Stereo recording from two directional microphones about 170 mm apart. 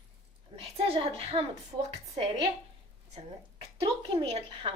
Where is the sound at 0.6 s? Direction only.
35° right (ahead or behind).